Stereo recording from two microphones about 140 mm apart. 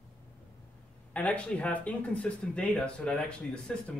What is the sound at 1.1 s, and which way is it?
Speech, 10° left (ahead or behind).